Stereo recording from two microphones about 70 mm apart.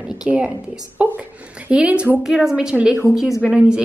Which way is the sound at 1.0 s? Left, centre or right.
Centre.